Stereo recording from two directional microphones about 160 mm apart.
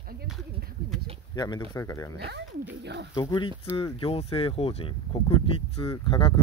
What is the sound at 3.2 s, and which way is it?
Speech, 30° left (ahead or behind).